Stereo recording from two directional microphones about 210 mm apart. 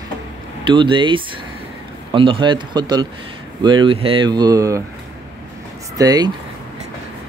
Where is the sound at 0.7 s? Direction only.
25° right (ahead or behind).